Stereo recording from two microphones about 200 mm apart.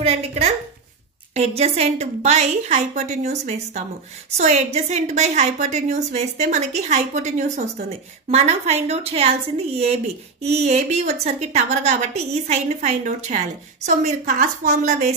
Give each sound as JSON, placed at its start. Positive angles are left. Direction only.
{"t": 0.0, "sound": "a woman's voice", "side_deg": -30}